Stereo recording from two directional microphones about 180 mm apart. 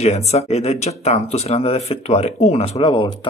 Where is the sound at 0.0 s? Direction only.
35° left (ahead or behind).